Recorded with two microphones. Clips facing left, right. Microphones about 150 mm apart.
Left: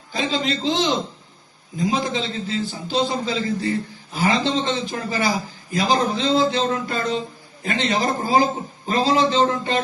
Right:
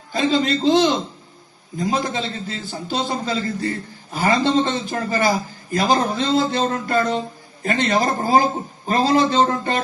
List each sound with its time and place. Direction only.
0.1 s a man's voice: 45° right (ahead or behind)